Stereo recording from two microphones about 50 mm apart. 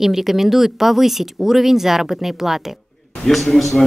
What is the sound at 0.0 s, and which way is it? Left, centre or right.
A man's voice, centre.